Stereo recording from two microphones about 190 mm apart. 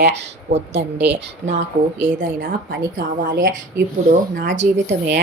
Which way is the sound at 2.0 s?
45° right (ahead or behind).